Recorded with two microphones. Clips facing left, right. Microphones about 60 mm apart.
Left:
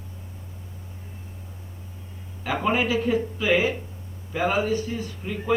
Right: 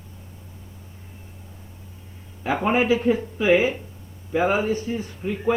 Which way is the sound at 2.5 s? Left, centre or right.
Right.